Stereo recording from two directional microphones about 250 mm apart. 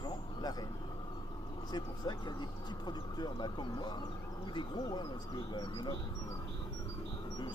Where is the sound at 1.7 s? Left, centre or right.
Centre.